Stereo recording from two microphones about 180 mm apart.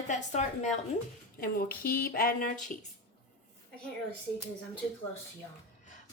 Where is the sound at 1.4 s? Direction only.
55° left (ahead or behind).